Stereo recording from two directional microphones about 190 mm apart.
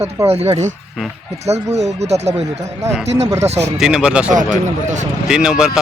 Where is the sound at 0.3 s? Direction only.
35° right (ahead or behind).